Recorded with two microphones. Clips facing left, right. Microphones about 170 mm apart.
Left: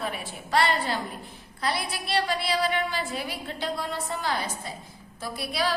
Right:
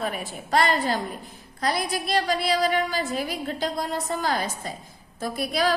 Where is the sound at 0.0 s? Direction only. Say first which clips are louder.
Right 3 dB; 45° right (ahead or behind).